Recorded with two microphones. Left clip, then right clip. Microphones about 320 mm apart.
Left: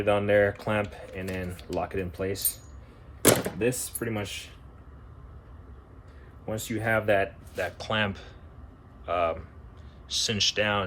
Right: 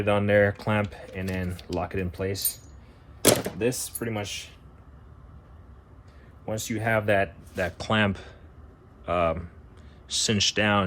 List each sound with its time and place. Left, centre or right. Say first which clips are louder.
0.0 s speech: right 1 dB; centre
3.6 s speech: right 1 dB; centre
6.4 s speech: right 1 dB; centre